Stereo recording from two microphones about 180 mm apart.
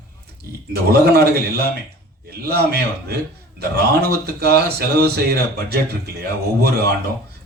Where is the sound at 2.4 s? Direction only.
60° right (ahead or behind).